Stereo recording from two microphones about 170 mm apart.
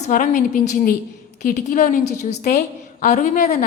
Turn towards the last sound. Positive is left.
turn(degrees=45)  # may be behind; listen again after turning